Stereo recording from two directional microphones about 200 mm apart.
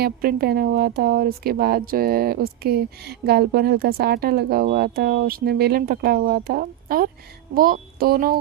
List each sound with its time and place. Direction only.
0.0 s a woman's voice: 45° right (ahead or behind)